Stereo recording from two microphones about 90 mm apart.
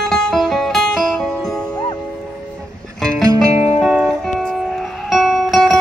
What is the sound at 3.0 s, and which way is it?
Music, 40° right (ahead or behind).